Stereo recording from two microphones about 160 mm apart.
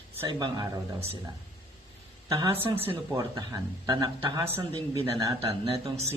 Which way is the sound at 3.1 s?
20° right (ahead or behind).